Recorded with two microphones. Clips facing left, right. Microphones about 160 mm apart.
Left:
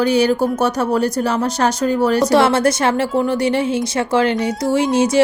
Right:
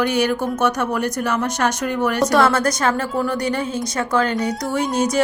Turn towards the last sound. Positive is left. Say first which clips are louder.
# left 4 dB
turn(degrees=25)  # may be behind; listen again after turning